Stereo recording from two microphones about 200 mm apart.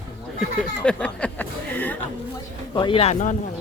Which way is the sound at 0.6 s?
5° left (ahead or behind).